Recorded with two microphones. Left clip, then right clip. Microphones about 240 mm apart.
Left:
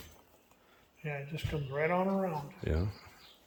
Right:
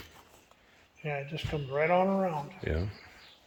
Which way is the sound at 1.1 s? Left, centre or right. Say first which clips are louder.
Right 5 dB; right.